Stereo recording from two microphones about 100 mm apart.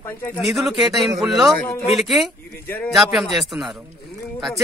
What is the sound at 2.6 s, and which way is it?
Speech, 15° left (ahead or behind).